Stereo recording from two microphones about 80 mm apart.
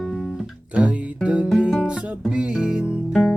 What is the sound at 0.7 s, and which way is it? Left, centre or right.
Guitar, centre.